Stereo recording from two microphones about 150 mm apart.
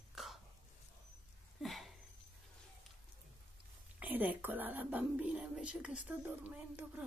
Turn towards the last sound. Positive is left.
turn(degrees=-10)  # may be behind; listen again after turning